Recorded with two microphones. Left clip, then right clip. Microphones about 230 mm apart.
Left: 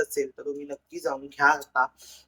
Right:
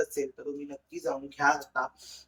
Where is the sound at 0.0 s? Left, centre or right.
Centre.